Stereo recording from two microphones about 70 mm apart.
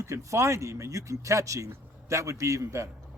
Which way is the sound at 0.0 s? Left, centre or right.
Right.